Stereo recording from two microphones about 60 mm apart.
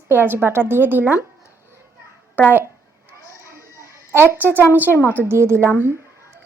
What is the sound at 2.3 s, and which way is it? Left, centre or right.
Speech, left.